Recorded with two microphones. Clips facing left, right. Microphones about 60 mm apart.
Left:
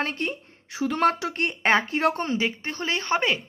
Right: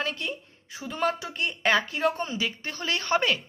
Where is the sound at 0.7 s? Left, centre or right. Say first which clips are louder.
Left 6 dB; left.